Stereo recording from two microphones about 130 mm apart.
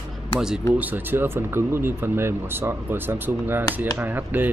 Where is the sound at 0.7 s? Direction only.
15° right (ahead or behind).